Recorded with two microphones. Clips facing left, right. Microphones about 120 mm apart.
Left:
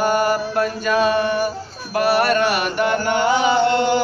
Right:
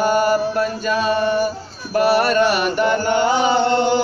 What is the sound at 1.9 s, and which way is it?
Mantra, 35° right (ahead or behind).